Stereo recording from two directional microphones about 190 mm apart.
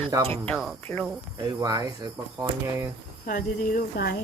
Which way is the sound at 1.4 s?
20° right (ahead or behind).